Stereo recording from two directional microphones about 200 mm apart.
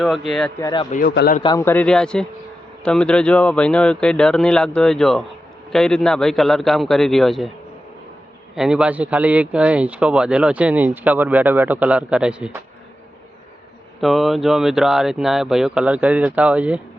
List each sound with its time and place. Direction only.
0.0 s speech: centre (ahead or behind)
0.6 s speech: 20° left (ahead or behind)
1.1 s a man's voice: 55° left (ahead or behind)
1.4 s speech: 20° left (ahead or behind); by 7.5 s centre (ahead or behind)
8.5 s speech: 5° right (ahead or behind)
14.0 s speech: centre (ahead or behind)